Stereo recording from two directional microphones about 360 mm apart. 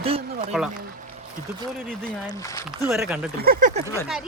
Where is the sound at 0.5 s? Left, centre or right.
Centre.